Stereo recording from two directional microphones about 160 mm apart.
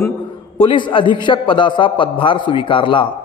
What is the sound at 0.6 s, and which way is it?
A man's voice, 30° left (ahead or behind).